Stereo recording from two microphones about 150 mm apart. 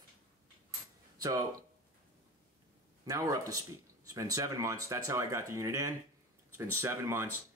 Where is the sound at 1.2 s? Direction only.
25° right (ahead or behind).